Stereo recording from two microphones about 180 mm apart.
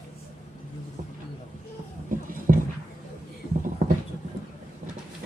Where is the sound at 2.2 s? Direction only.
50° right (ahead or behind).